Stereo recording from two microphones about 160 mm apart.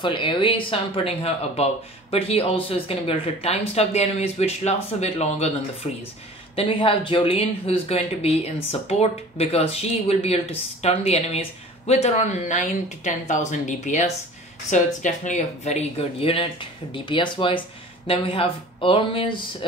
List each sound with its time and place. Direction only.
0.0 s speech: 30° left (ahead or behind)